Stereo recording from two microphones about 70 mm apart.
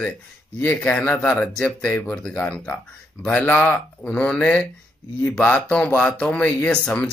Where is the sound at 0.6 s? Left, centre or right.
Left.